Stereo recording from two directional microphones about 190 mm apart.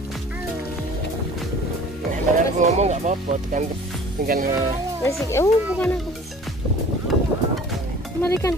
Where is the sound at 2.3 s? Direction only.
40° right (ahead or behind).